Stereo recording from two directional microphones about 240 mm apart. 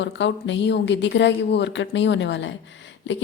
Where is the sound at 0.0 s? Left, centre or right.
Left.